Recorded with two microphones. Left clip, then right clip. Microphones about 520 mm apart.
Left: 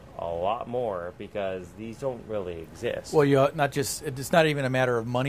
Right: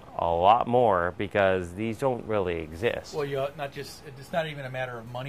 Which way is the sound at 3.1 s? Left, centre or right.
Left.